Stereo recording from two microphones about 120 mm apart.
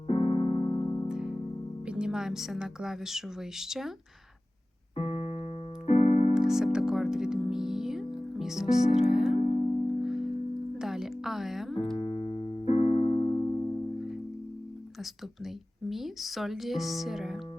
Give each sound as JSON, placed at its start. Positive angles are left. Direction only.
{"t": 0.1, "sound": "keyboard", "side_deg": 60}
{"t": 1.0, "sound": "music", "side_deg": -5}
{"t": 1.9, "sound": "speech", "side_deg": -5}
{"t": 4.9, "sound": "music", "side_deg": 60}
{"t": 5.8, "sound": "keyboard", "side_deg": 60}
{"t": 6.3, "sound": "music", "side_deg": -5}
{"t": 11.9, "sound": "music", "side_deg": 50}
{"t": 12.6, "sound": "keyboard", "side_deg": 60}
{"t": 13.3, "sound": "music", "side_deg": 30}
{"t": 15.9, "sound": "speech", "side_deg": 0}